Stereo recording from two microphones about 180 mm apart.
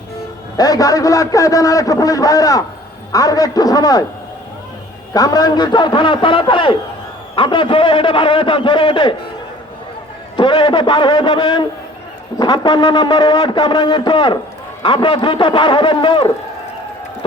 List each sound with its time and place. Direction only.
0.5 s a man's voice: 20° left (ahead or behind)
5.1 s a man's voice: 20° left (ahead or behind)
10.3 s a man's voice: 25° left (ahead or behind)